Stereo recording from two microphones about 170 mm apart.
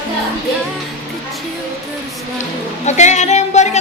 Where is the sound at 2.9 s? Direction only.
45° left (ahead or behind).